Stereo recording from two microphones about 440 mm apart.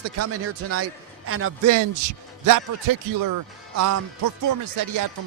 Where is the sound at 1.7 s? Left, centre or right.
Right.